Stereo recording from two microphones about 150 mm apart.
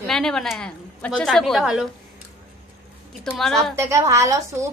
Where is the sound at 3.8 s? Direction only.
20° right (ahead or behind).